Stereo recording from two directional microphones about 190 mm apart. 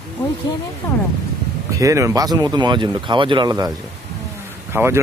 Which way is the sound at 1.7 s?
15° right (ahead or behind).